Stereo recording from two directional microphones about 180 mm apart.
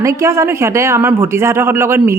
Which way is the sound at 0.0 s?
15° right (ahead or behind).